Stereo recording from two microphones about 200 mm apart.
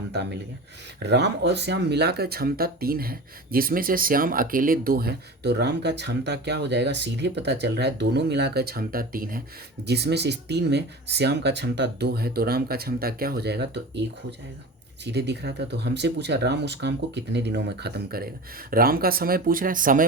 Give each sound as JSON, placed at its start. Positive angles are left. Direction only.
{"t": 0.1, "sound": "speech", "side_deg": -60}
{"t": 9.8, "sound": "speech", "side_deg": -55}